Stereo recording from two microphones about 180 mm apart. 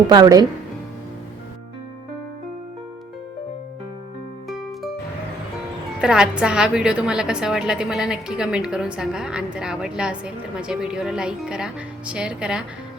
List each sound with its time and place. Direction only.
0.1 s speech: 20° right (ahead or behind)
4.4 s music: centre (ahead or behind)
6.0 s a woman's voice: 5° right (ahead or behind)